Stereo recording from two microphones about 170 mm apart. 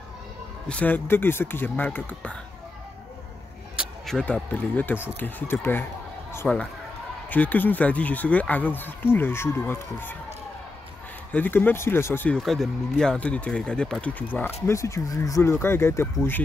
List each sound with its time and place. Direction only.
0.7 s speech: 10° left (ahead or behind)
3.7 s speech: centre (ahead or behind)
11.3 s speech: 10° left (ahead or behind)